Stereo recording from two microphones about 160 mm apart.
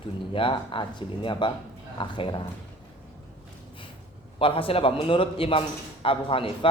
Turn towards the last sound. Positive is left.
turn(degrees=35)  # may be behind; listen again after turning